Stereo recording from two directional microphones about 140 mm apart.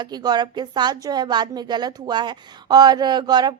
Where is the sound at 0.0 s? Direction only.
30° right (ahead or behind).